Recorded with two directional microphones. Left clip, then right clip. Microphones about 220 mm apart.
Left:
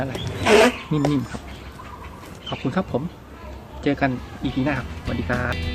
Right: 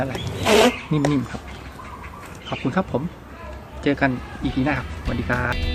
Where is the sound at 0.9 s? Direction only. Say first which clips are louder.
Right 1 dB; 5° right (ahead or behind).